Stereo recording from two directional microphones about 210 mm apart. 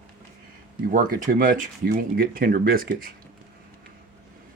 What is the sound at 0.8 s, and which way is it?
Speech, 40° right (ahead or behind).